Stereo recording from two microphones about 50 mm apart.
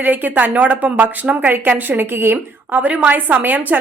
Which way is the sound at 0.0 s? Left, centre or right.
Right.